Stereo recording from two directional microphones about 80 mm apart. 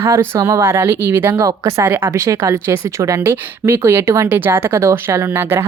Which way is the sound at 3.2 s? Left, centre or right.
Right.